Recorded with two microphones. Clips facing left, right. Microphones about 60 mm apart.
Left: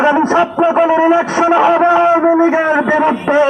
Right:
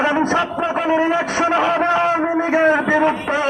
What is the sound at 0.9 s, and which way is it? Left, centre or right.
Radio, centre.